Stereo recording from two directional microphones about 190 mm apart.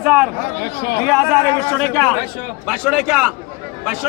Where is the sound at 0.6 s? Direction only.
55° left (ahead or behind).